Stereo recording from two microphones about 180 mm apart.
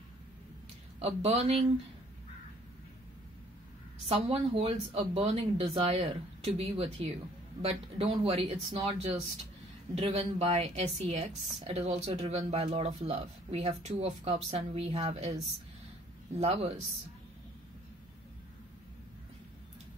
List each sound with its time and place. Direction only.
0.9 s a woman's voice: 35° right (ahead or behind)
4.1 s a woman's voice: 30° right (ahead or behind)